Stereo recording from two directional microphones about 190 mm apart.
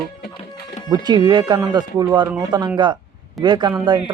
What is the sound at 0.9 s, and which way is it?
Speech, 20° right (ahead or behind).